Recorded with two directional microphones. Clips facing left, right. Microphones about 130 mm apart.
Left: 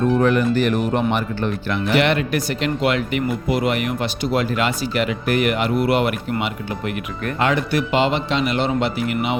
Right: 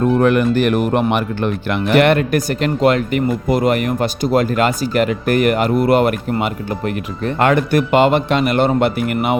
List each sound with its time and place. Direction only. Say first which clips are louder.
0.2 s speech: right 3 dB; 60° right (ahead or behind)